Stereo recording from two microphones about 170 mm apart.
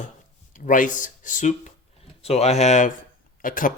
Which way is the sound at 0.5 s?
50° left (ahead or behind).